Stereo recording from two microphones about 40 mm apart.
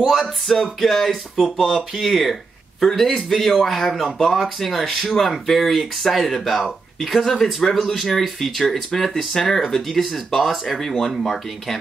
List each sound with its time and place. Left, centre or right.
0.5 s speech: centre